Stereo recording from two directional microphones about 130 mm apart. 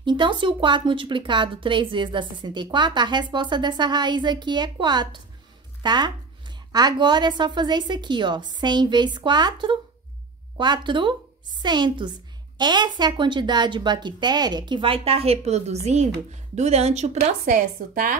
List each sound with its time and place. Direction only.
0.0 s speech: 35° right (ahead or behind); by 18.1 s 85° right